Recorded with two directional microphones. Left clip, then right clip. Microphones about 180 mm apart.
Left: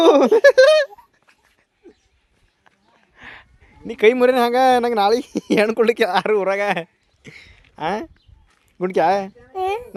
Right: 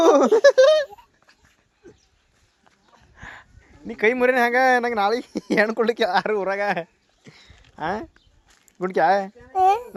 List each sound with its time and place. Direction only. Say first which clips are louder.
0.0 s speech: left 3 dB; 40° left (ahead or behind)
3.2 s a sound: left 1 dB; 35° left (ahead or behind)
3.8 s speech: left 5 dB; 55° left (ahead or behind)
9.5 s a woman's voice: right 7 dB; centre (ahead or behind)